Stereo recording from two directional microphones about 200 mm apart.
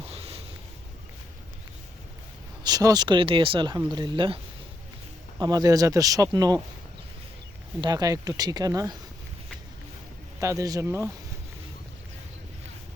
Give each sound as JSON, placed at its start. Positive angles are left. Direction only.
{"t": 0.0, "sound": "a sound", "side_deg": -30}
{"t": 2.6, "sound": "speech", "side_deg": -20}
{"t": 5.4, "sound": "speech", "side_deg": -20}
{"t": 7.8, "sound": "speech", "side_deg": -20}
{"t": 10.4, "sound": "speech", "side_deg": -15}